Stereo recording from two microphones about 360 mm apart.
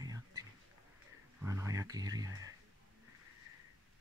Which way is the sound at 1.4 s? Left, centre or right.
Centre.